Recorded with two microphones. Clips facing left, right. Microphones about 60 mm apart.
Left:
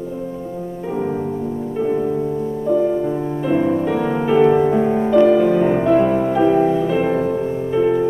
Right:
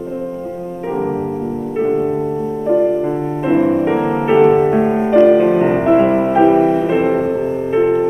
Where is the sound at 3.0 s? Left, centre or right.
Right.